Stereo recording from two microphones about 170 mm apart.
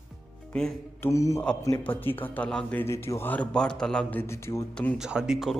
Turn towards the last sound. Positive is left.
turn(degrees=-5)  # may be behind; listen again after turning